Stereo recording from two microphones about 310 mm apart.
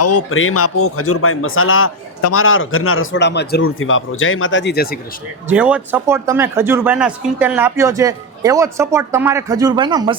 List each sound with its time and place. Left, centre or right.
0.0 s a man's voice: left
5.5 s speech: centre